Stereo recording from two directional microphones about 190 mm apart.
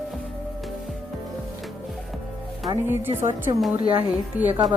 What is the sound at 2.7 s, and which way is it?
Speech, 10° right (ahead or behind).